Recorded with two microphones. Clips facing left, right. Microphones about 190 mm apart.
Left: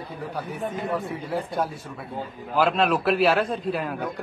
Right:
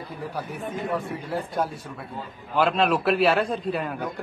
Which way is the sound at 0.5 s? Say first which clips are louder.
Left 2 dB; centre (ahead or behind).